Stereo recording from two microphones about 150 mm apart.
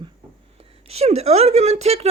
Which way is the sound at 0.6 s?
40° right (ahead or behind).